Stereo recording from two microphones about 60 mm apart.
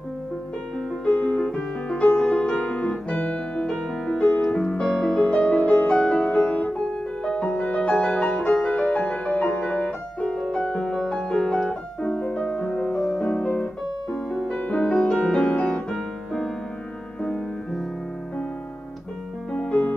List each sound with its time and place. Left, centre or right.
1.0 s music: left
7.2 s music: centre
10.6 s piano: centre
13.2 s music: centre
14.5 s music: left
15.9 s music: centre
19.5 s music: centre